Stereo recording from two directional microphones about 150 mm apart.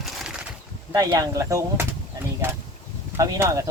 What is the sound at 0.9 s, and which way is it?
Speech, 25° right (ahead or behind).